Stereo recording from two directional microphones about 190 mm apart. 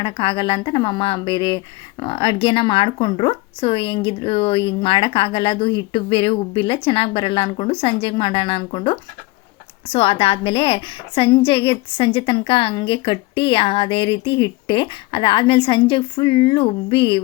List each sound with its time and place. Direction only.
0.0 s a woman's voice: 25° left (ahead or behind)